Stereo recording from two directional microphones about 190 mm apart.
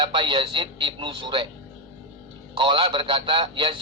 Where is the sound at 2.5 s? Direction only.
25° right (ahead or behind).